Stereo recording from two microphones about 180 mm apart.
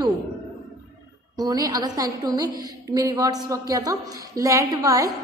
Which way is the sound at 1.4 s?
20° right (ahead or behind).